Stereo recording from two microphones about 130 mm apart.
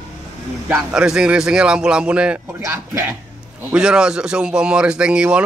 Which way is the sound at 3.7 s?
5° right (ahead or behind).